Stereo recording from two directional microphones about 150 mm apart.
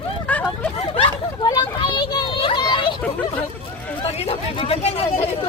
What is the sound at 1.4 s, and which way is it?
Children playing, 30° left (ahead or behind).